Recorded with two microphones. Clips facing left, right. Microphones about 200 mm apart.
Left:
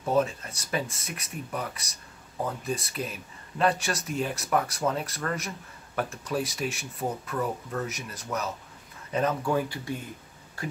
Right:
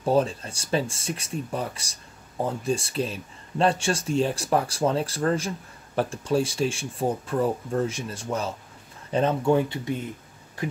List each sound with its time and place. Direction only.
0.0 s speech: 30° right (ahead or behind)